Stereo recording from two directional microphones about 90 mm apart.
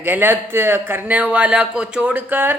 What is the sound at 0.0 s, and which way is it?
A woman's voice, 25° right (ahead or behind).